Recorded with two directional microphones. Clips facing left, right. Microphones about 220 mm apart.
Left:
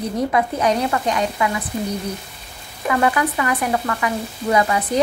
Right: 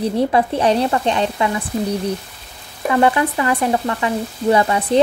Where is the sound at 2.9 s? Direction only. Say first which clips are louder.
Right 3 dB; 25° right (ahead or behind).